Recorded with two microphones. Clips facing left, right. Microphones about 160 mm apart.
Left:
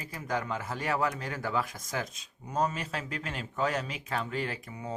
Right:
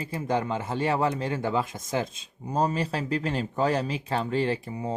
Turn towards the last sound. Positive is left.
turn(degrees=-30)  # may be behind; listen again after turning